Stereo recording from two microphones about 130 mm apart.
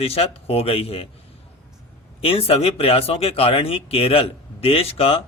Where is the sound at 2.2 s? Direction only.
50° left (ahead or behind).